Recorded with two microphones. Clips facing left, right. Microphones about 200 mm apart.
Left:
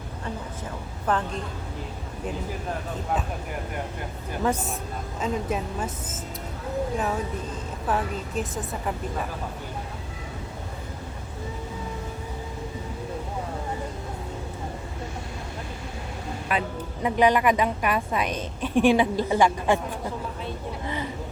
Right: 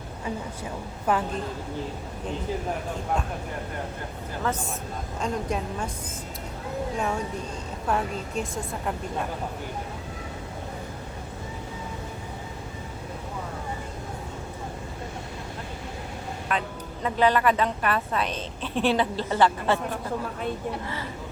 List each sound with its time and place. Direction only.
1.1 s a woman's voice: 10° right (ahead or behind)
5.2 s a woman's voice: 5° left (ahead or behind)
6.9 s a woman's voice: centre (ahead or behind)
16.5 s a woman's voice: 10° left (ahead or behind)
20.8 s a woman's voice: 20° left (ahead or behind)